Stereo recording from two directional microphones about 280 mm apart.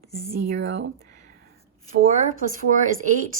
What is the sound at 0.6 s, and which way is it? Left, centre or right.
Speech, right.